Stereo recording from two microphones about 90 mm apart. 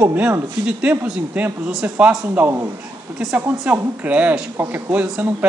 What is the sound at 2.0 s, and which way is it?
Speech, 15° right (ahead or behind).